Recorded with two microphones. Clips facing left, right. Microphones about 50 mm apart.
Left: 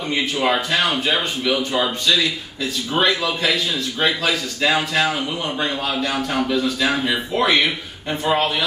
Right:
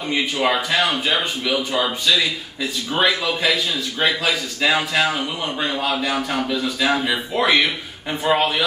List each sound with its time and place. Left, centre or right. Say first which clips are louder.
0.1 s a man's voice: even; centre
3.0 s a man's voice: even; centre